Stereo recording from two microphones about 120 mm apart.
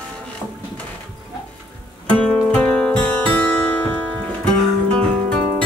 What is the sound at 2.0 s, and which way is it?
Music, 10° left (ahead or behind).